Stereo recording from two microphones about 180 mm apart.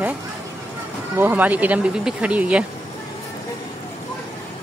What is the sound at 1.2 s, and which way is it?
Speech, 10° right (ahead or behind).